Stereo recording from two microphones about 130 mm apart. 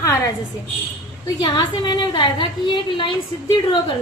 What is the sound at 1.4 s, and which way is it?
A woman's voice, 35° left (ahead or behind).